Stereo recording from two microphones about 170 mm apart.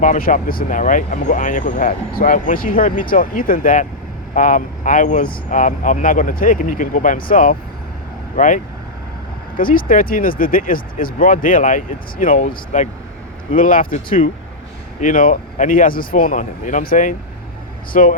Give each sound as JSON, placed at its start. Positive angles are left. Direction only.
{"t": 0.0, "sound": "speech", "side_deg": 50}